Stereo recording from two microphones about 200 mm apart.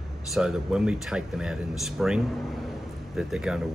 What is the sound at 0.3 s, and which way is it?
Speech, 5° right (ahead or behind).